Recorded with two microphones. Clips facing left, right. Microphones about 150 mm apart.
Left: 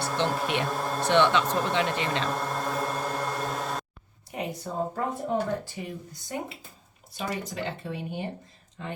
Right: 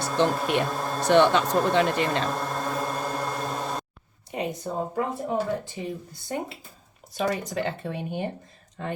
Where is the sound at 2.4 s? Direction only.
Centre (ahead or behind).